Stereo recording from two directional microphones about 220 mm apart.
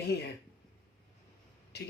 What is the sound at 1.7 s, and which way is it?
Speech, 50° left (ahead or behind).